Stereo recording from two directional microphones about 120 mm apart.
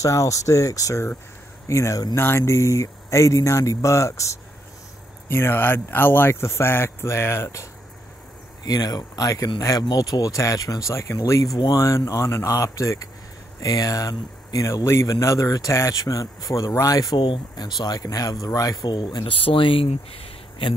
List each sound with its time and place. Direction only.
0.0 s speech: 25° left (ahead or behind)
8.6 s speech: 30° left (ahead or behind)
17.2 s speech: 40° left (ahead or behind)